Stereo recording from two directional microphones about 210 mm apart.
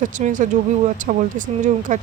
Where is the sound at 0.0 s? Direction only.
35° right (ahead or behind).